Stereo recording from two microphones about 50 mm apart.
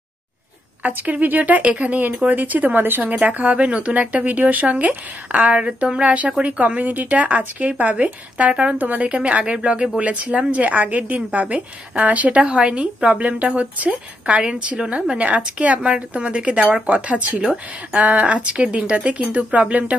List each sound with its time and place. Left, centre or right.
0.8 s speech: right
3.0 s a woman's voice: right
5.6 s a woman's voice: centre